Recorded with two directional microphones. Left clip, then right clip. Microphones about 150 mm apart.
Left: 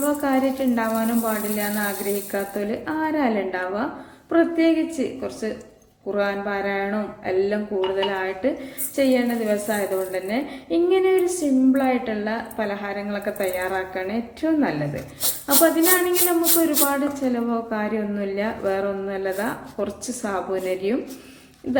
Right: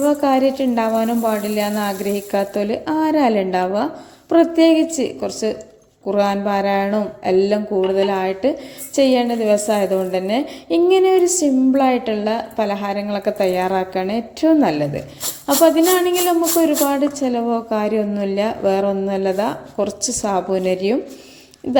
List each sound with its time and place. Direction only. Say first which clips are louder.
0.0 s a woman's voice: right 6 dB; 50° right (ahead or behind)
16.6 s a woman's voice: right 5 dB; 40° right (ahead or behind)